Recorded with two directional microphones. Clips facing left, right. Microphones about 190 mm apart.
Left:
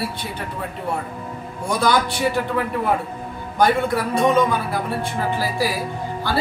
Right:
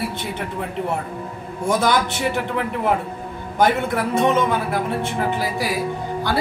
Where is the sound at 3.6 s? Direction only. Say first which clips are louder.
Even; 20° right (ahead or behind).